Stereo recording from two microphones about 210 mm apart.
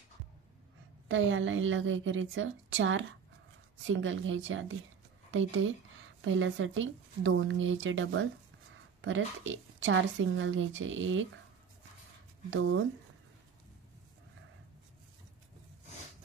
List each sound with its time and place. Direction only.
1.0 s a woman's voice: 65° right (ahead or behind)
12.4 s a woman's voice: 60° right (ahead or behind)